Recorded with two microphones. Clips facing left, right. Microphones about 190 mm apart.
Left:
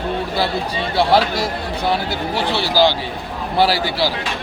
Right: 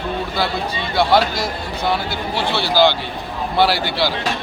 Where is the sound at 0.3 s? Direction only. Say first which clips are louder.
Left 1 dB; 35° left (ahead or behind).